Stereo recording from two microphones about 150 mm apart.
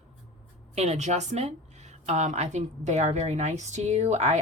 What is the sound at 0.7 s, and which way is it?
Speech, 50° right (ahead or behind).